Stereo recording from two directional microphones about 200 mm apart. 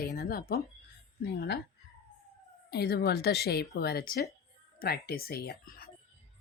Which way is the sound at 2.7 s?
55° left (ahead or behind).